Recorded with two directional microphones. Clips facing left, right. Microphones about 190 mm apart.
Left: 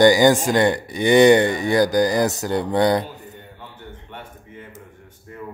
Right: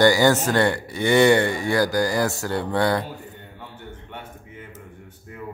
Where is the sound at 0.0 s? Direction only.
15° left (ahead or behind).